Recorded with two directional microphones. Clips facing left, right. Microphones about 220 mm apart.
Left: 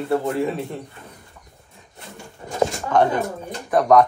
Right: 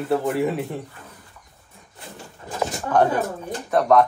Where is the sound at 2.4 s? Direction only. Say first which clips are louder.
Left 4 dB; 5° right (ahead or behind).